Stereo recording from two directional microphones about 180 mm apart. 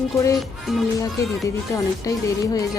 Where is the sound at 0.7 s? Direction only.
Centre (ahead or behind).